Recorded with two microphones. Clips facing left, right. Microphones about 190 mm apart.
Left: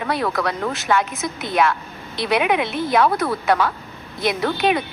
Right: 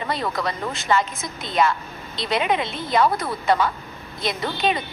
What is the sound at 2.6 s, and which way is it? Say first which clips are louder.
Speech: left 5 dB; 60° left (ahead or behind).